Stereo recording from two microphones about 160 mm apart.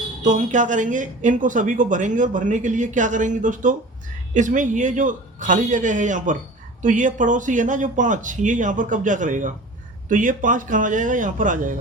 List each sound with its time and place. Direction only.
0.2 s speech: 50° right (ahead or behind)